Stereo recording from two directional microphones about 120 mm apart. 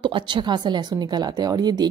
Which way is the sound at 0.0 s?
40° right (ahead or behind).